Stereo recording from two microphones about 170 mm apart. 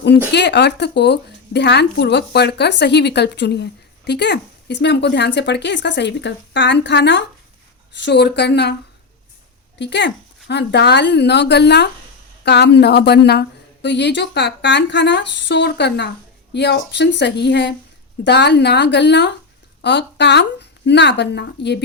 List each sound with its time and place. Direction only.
0.3 s speech: 80° left
9.7 s a woman's voice: 90° left